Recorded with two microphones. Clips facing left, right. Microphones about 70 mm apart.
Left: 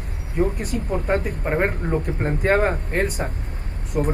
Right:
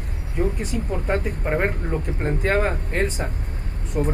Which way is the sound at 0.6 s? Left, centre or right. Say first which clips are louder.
Left 1 dB; left.